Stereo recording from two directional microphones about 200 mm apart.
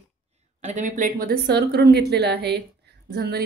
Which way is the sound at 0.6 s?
35° right (ahead or behind).